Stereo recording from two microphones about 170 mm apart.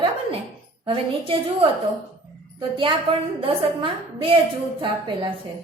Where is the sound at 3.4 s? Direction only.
30° right (ahead or behind).